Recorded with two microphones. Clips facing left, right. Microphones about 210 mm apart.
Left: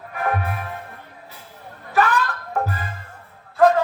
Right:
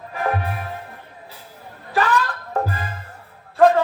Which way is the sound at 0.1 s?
30° right (ahead or behind).